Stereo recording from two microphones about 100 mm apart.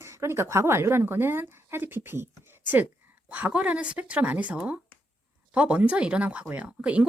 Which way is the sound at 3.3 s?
15° right (ahead or behind).